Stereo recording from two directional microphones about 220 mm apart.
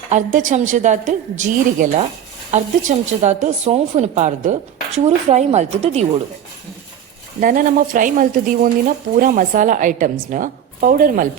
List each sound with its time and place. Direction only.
0.1 s a woman's voice: 35° right (ahead or behind)
7.3 s a woman's voice: 40° right (ahead or behind)